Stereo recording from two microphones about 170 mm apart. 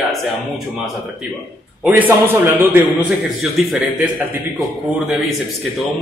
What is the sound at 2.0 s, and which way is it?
A man's voice, 10° right (ahead or behind).